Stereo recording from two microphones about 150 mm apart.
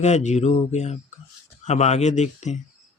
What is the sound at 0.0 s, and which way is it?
Speech, 50° left (ahead or behind).